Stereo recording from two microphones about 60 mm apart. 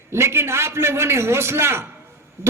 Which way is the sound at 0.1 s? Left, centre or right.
Right.